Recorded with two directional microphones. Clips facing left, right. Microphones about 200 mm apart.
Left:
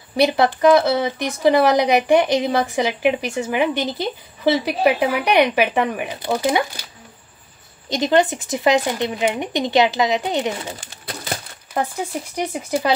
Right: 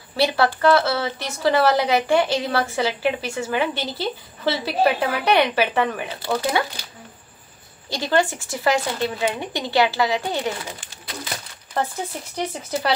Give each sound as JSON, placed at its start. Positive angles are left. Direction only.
{"t": 0.1, "sound": "speech", "side_deg": 15}
{"t": 7.9, "sound": "speech", "side_deg": 20}
{"t": 11.7, "sound": "speech", "side_deg": 10}